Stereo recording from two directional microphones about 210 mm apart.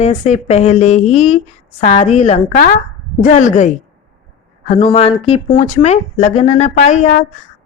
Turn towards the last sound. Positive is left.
turn(degrees=35)  # may be behind; listen again after turning